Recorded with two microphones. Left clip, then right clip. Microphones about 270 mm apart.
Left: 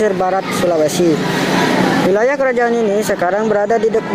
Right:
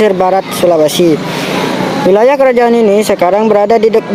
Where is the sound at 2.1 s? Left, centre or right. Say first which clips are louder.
Right 7 dB; right.